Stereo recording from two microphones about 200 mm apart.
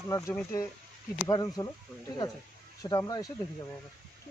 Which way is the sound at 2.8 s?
20° left (ahead or behind).